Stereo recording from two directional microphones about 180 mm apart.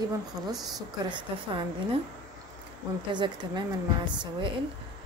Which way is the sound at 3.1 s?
25° right (ahead or behind).